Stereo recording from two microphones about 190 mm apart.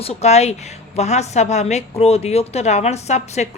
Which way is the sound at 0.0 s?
35° left (ahead or behind).